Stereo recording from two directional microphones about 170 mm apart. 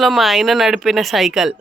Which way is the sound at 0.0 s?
Centre (ahead or behind).